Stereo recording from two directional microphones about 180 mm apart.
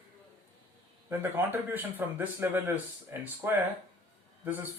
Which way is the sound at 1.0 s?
10° right (ahead or behind).